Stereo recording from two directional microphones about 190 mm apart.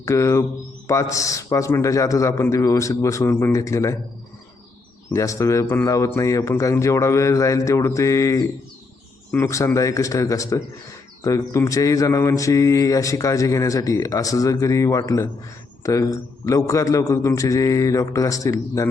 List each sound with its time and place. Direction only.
0.0 s mantra: 15° left (ahead or behind)
5.1 s mantra: 15° left (ahead or behind)